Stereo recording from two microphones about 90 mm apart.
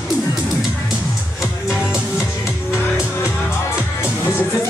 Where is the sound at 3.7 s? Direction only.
25° left (ahead or behind).